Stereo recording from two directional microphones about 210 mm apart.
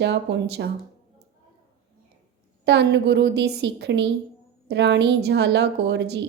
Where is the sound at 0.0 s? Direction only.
55° right (ahead or behind).